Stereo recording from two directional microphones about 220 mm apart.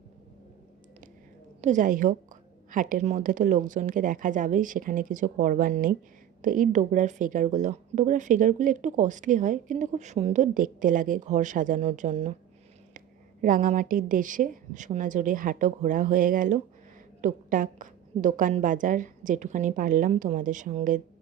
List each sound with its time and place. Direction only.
1.6 s speech: 35° right (ahead or behind)
13.4 s speech: 35° right (ahead or behind)